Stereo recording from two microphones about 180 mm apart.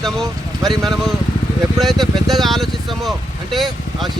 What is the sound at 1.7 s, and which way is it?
Speech, centre (ahead or behind).